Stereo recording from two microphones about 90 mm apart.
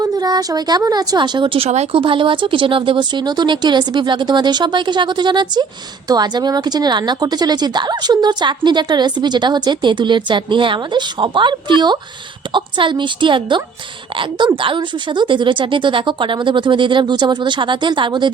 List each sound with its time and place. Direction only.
0.0 s a woman's voice: 45° right (ahead or behind)